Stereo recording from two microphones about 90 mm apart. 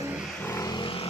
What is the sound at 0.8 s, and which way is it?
Vehicle, 90° left.